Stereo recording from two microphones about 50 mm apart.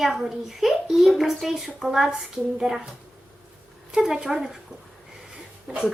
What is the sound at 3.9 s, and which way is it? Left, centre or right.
Speech, centre.